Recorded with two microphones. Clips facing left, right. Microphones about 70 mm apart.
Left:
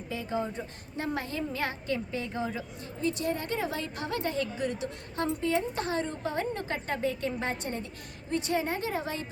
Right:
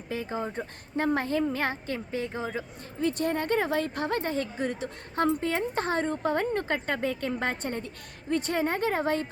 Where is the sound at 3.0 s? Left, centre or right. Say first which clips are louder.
Right 3 dB; right.